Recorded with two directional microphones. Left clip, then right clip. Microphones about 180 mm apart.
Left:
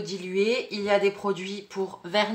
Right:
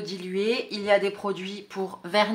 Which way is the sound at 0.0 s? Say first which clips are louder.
Left 2 dB; 30° right (ahead or behind).